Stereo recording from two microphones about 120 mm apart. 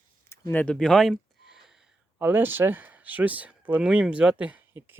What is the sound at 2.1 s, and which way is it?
Speech, 15° right (ahead or behind).